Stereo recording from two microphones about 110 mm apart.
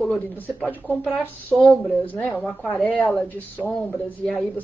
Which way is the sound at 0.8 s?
5° left (ahead or behind).